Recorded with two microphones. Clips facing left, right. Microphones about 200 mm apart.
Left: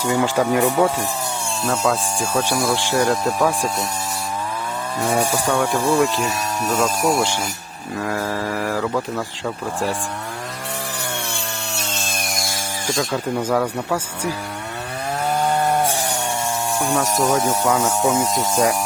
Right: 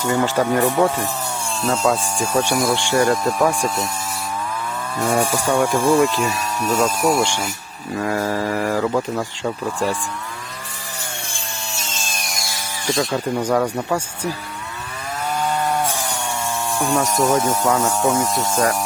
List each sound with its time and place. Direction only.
0.0 s speech: 10° left (ahead or behind)
5.0 s speech: centre (ahead or behind)
11.3 s wood: 65° left (ahead or behind)
13.4 s speech: 5° left (ahead or behind)
16.9 s speech: centre (ahead or behind)